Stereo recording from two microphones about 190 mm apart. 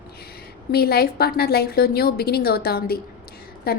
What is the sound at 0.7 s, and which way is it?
A woman's voice, 55° left (ahead or behind).